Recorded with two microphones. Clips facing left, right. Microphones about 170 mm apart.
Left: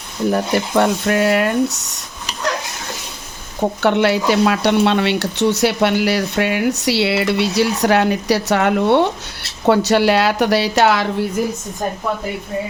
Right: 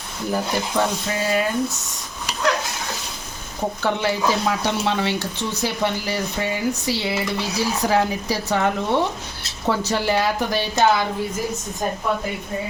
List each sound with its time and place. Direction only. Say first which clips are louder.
0.3 s speech: left 6 dB; 70° left (ahead or behind)
3.8 s speech: left 7 dB; 70° left (ahead or behind)